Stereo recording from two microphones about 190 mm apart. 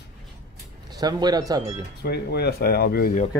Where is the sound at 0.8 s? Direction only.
20° right (ahead or behind).